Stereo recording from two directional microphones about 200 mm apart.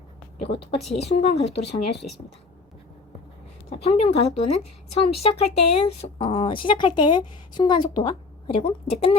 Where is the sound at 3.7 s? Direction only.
30° left (ahead or behind).